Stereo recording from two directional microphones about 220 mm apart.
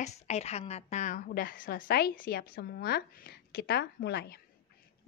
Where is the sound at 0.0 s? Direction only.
30° left (ahead or behind).